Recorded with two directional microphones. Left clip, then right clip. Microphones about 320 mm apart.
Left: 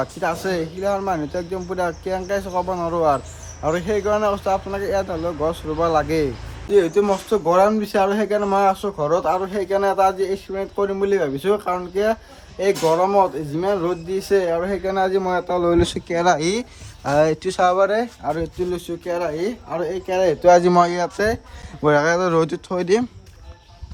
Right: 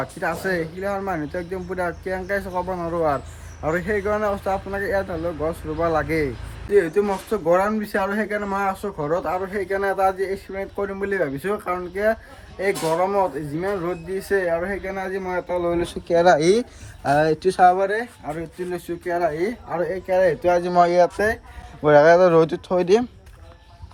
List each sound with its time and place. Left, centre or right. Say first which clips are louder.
0.0 s speech: left 2 dB; centre
16.0 s speech: right 7 dB; centre
17.8 s speech: left 4 dB; centre
18.7 s speech: left 1 dB; centre